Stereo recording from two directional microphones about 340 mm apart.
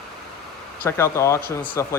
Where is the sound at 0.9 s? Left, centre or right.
Centre.